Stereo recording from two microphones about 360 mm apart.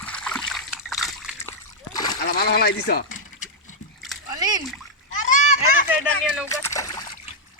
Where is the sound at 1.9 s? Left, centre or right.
Centre.